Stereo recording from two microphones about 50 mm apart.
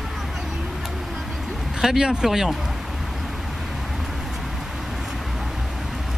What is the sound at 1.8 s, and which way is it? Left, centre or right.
Speech, centre.